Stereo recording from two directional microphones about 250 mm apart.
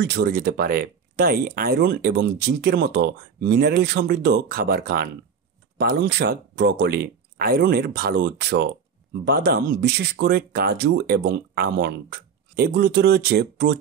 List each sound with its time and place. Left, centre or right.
0.0 s speech: right